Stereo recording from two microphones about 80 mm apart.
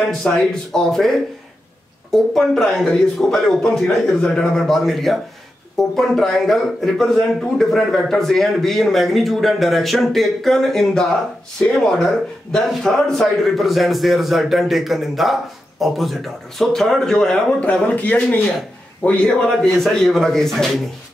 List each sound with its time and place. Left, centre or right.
0.1 s speech: centre